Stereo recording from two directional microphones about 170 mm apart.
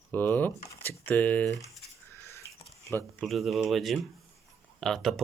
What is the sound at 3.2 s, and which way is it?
Speech, centre (ahead or behind).